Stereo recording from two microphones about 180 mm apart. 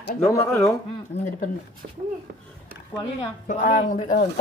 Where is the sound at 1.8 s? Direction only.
55° right (ahead or behind).